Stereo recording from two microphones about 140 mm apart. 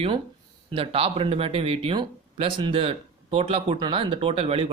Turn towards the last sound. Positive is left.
turn(degrees=-45)  # may be behind; listen again after turning